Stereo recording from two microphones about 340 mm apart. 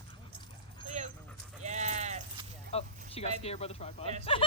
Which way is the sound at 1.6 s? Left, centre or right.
Centre.